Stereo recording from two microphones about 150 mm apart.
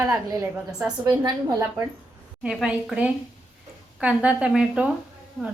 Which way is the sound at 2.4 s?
5° right (ahead or behind).